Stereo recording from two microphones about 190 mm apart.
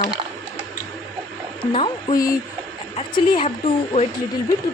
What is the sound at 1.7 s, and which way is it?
A woman's voice, 30° left (ahead or behind).